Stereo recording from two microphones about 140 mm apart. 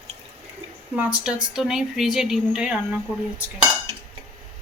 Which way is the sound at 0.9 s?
10° right (ahead or behind).